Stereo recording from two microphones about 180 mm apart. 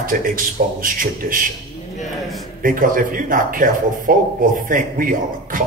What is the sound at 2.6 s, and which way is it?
A man's voice, 50° right (ahead or behind).